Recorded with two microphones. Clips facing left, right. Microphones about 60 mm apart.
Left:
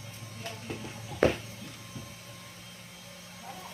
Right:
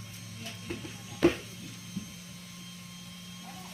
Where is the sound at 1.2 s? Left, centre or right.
Left.